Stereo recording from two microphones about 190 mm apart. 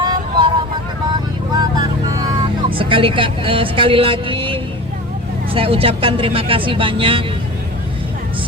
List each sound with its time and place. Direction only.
0.0 s vehicle: 25° right (ahead or behind)
2.6 s speech: 25° right (ahead or behind)